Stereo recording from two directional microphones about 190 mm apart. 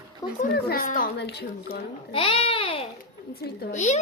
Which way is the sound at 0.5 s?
50° left (ahead or behind).